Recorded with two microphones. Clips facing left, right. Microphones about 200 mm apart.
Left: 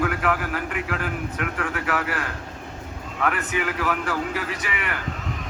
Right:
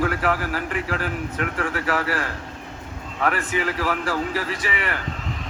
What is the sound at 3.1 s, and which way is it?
A man's voice, 30° right (ahead or behind).